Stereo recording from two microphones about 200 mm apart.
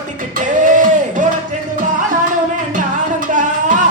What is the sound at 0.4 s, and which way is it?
Music, 40° right (ahead or behind).